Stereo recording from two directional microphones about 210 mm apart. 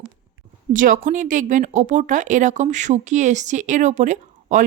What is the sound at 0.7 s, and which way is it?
Speech, 40° right (ahead or behind).